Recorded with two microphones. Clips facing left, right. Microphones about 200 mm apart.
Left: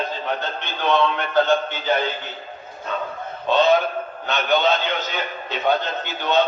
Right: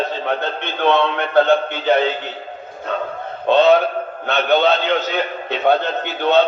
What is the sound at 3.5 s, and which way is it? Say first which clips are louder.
A man's voice: right 5 dB; 65° right (ahead or behind).